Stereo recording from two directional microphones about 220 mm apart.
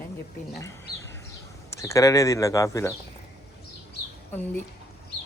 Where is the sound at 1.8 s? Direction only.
15° left (ahead or behind).